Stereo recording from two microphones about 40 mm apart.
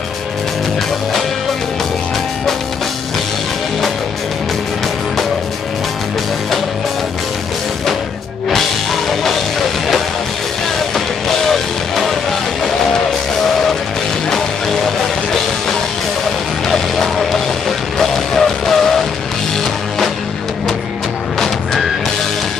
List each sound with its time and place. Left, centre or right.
9.2 s music: centre
11.2 s music: centre
16.6 s music: centre